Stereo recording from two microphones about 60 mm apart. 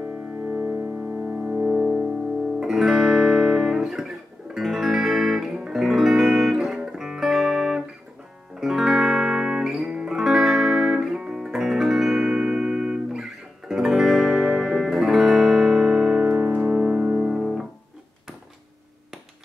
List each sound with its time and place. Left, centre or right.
0.0 s music: right
2.6 s music: centre
14.3 s music: centre
14.6 s music: centre
16.3 s piano: right
16.6 s piano: centre
17.4 s music: centre